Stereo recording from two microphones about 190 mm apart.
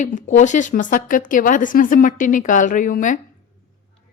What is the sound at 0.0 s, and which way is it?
Speech, 40° left (ahead or behind).